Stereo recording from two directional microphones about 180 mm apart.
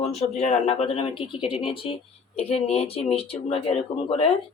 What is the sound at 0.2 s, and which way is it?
Speech, 40° left (ahead or behind).